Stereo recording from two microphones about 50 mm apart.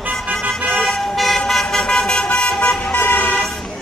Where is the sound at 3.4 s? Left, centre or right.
Centre.